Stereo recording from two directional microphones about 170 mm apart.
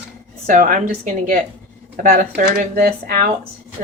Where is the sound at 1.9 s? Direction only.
50° right (ahead or behind).